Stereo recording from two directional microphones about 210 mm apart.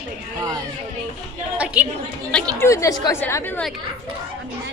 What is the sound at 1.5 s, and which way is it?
Speech, 5° right (ahead or behind).